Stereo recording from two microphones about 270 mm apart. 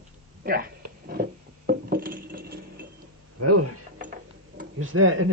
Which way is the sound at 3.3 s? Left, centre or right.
Right.